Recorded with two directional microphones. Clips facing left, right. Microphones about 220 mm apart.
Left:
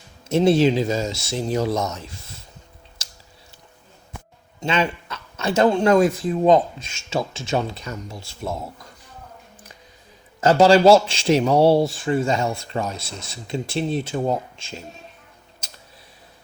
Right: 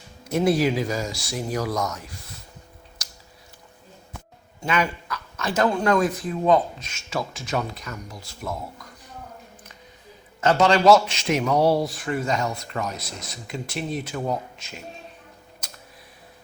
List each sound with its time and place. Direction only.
0.3 s a man's voice: 25° left (ahead or behind)
3.0 s a sound: 25° left (ahead or behind)
4.6 s a man's voice: 25° left (ahead or behind)
10.4 s a man's voice: 30° left (ahead or behind)